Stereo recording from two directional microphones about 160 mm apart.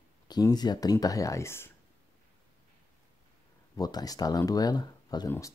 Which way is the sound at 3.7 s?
25° left (ahead or behind).